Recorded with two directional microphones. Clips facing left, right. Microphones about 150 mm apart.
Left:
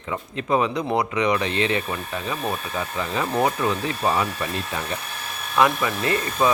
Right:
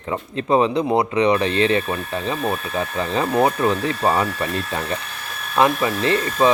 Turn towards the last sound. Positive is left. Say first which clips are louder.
# right 4 dB
turn(degrees=-25)  # may be behind; listen again after turning